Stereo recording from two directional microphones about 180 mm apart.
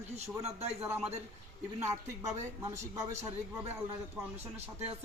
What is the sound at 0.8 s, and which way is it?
Speech, 5° right (ahead or behind).